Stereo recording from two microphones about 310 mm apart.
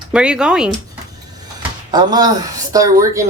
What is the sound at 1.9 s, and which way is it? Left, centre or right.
Speech, centre.